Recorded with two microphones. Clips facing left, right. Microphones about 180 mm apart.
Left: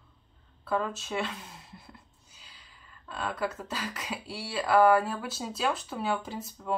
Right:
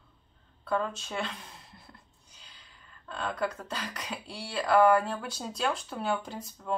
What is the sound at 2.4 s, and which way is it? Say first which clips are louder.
Speech: even; 5° left (ahead or behind).